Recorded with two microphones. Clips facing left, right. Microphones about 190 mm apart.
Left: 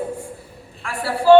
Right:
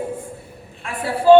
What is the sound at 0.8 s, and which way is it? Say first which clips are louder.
Speech: right 1 dB; 20° right (ahead or behind).